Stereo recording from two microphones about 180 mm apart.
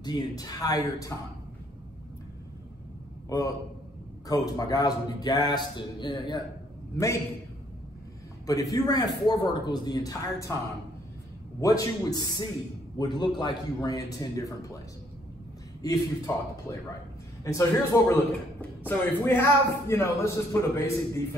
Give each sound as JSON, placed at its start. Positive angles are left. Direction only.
{"t": 0.0, "sound": "a man's voice", "side_deg": 20}
{"t": 3.3, "sound": "a man's voice", "side_deg": 20}
{"t": 8.5, "sound": "a man's voice", "side_deg": 20}
{"t": 11.6, "sound": "a man's voice", "side_deg": 20}
{"t": 15.8, "sound": "a man's voice", "side_deg": 20}